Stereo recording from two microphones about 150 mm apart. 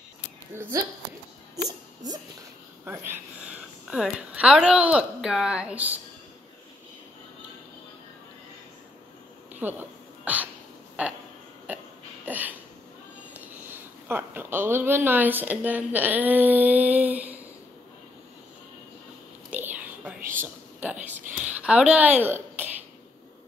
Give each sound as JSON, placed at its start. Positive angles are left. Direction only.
{"t": 0.5, "sound": "speech", "side_deg": -15}
{"t": 2.8, "sound": "speech", "side_deg": -15}
{"t": 9.5, "sound": "hiccup", "side_deg": -10}
{"t": 11.0, "sound": "speech", "side_deg": -10}
{"t": 11.7, "sound": "throat clearing", "side_deg": -10}
{"t": 12.3, "sound": "a sound", "side_deg": -10}
{"t": 13.3, "sound": "speech", "side_deg": -10}
{"t": 19.5, "sound": "whispering", "side_deg": -10}
{"t": 20.3, "sound": "a sound", "side_deg": -10}
{"t": 21.4, "sound": "speech", "side_deg": -10}